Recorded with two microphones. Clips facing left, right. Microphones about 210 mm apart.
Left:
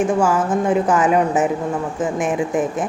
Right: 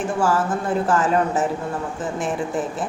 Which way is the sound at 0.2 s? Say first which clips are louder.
Left 3 dB; 15° left (ahead or behind).